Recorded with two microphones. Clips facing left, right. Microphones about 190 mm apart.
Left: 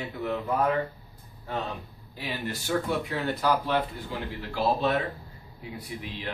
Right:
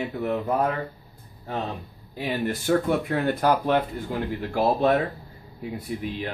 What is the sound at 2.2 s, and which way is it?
Speech, 50° right (ahead or behind).